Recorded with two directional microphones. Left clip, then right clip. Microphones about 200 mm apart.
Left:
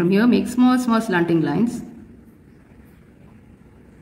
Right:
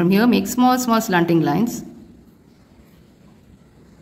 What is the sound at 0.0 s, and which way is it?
Speech, 30° right (ahead or behind).